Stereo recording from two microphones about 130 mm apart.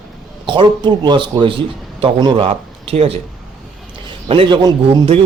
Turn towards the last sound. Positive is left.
turn(degrees=-45)  # may be behind; listen again after turning